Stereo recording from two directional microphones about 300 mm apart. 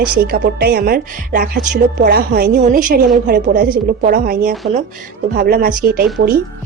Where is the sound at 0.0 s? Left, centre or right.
Right.